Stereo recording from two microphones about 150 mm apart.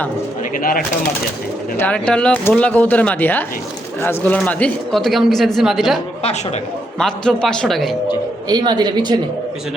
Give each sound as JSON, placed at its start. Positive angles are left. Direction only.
{"t": 0.5, "sound": "speech", "side_deg": 70}
{"t": 1.8, "sound": "speech", "side_deg": 5}
{"t": 7.0, "sound": "speech", "side_deg": 5}
{"t": 8.4, "sound": "a woman's voice", "side_deg": -30}